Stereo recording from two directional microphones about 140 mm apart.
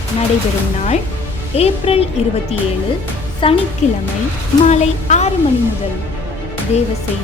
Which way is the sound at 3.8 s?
55° left (ahead or behind).